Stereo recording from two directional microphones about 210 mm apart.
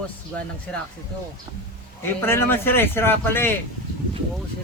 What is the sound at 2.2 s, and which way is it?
A man's voice, 10° left (ahead or behind).